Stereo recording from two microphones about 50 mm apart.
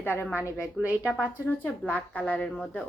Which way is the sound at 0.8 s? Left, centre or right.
Centre.